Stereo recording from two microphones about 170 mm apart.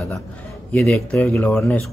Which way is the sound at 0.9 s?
5° left (ahead or behind).